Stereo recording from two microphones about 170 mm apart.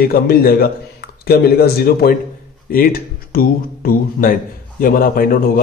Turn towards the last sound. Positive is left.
turn(degrees=55)  # may be behind; listen again after turning